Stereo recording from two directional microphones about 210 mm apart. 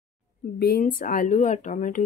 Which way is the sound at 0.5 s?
50° left (ahead or behind).